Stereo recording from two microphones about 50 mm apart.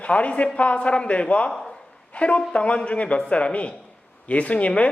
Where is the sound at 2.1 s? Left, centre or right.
Left.